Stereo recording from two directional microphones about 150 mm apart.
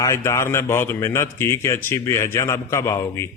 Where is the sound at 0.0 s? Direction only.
20° left (ahead or behind).